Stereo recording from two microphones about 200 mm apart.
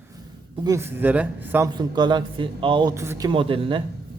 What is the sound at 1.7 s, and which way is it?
Speech, 20° right (ahead or behind).